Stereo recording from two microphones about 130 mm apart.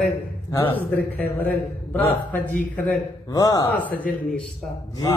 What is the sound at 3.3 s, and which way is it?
Speech, 30° left (ahead or behind).